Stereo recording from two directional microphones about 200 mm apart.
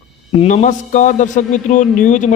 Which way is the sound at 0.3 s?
35° left (ahead or behind).